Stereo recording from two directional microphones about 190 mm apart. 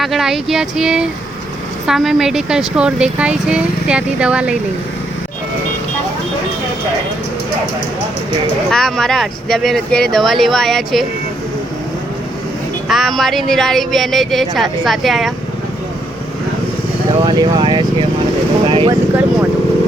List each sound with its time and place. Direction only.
0.0 s speech: centre (ahead or behind)
8.7 s speech: centre (ahead or behind)
12.9 s speech: centre (ahead or behind)
17.2 s speech: 20° right (ahead or behind)
18.6 s a sound: 25° right (ahead or behind)